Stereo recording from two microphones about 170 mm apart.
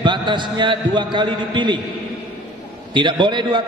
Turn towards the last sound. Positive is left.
turn(degrees=-25)  # may be behind; listen again after turning